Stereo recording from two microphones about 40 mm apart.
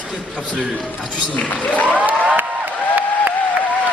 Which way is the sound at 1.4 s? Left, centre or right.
Left.